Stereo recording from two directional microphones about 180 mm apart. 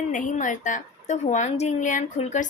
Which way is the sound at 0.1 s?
45° left (ahead or behind).